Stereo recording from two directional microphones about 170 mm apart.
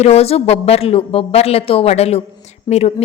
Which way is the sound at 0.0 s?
35° left (ahead or behind).